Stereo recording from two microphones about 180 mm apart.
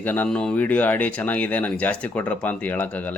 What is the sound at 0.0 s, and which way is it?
Speech, 10° left (ahead or behind).